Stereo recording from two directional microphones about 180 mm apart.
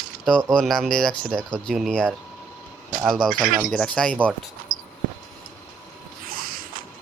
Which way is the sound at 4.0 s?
5° left (ahead or behind).